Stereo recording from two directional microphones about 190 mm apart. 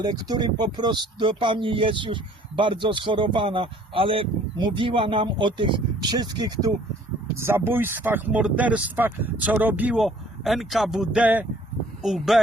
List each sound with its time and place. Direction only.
0.0 s speech: 20° right (ahead or behind); by 12.4 s centre (ahead or behind)